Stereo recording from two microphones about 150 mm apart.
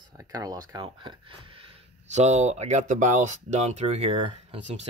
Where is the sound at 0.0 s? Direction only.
25° right (ahead or behind).